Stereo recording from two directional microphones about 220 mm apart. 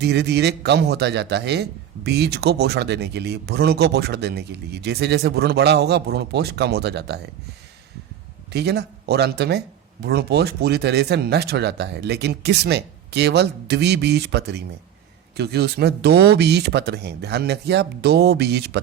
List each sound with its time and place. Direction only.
0.0 s speech: 50° right (ahead or behind)
8.5 s speech: 50° right (ahead or behind)